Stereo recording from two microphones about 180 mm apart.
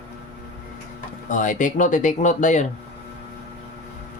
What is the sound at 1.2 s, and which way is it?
Speech, 45° left (ahead or behind).